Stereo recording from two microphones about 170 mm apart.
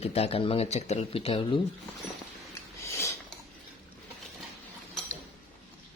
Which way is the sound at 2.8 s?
15° left (ahead or behind).